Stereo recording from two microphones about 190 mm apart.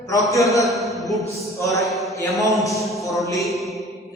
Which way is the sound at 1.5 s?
15° left (ahead or behind).